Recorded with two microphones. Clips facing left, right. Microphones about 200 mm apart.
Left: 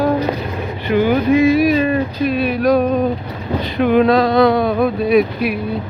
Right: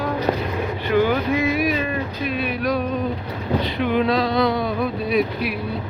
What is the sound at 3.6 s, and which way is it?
Speech, 50° left (ahead or behind).